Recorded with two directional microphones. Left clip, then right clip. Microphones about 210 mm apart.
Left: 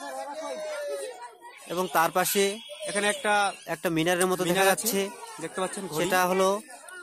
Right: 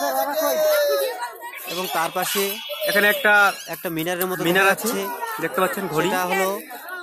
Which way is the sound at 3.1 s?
20° left (ahead or behind).